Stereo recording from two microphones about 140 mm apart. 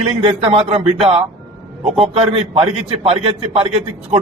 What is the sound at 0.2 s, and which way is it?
A man's voice, 45° right (ahead or behind).